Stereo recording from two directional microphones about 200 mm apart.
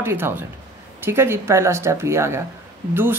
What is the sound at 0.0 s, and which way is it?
A man's voice, 10° right (ahead or behind).